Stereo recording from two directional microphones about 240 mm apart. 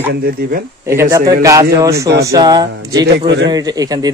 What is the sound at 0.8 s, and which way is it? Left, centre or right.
Speech, centre.